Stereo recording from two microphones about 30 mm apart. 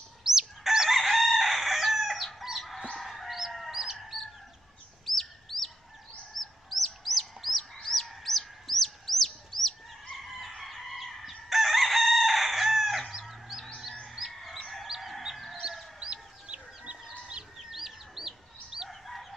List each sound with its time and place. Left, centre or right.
0.2 s chicken: centre
2.9 s fowl: centre
3.7 s chicken: centre
5.0 s bird: centre
6.3 s chicken: centre
13.3 s a sound: centre
14.4 s chicken: centre
16.0 s chicken: right
17.6 s chicken: centre
18.9 s chicken: centre